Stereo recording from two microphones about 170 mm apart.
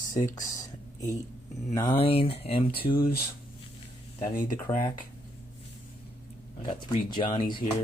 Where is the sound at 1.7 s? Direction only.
20° left (ahead or behind).